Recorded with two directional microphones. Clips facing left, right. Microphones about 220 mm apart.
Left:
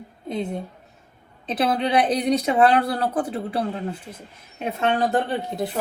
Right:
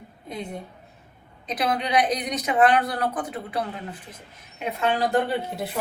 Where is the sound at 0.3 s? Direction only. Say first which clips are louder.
Left 6 dB; 25° left (ahead or behind).